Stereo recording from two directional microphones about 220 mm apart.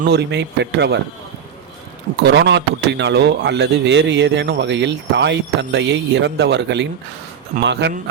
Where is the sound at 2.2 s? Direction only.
50° right (ahead or behind).